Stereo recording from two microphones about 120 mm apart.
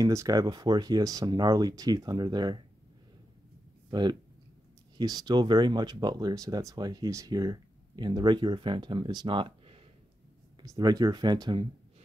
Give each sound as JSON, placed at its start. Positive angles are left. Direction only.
{"t": 0.0, "sound": "speech", "side_deg": -30}
{"t": 3.9, "sound": "speech", "side_deg": -35}
{"t": 10.6, "sound": "speech", "side_deg": -30}